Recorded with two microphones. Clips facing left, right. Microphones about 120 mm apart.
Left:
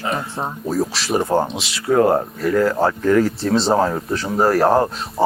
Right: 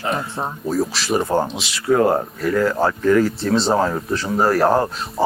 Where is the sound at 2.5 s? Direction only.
30° left (ahead or behind).